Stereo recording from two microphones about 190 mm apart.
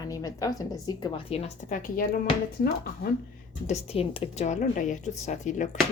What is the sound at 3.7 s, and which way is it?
Speech, 30° left (ahead or behind).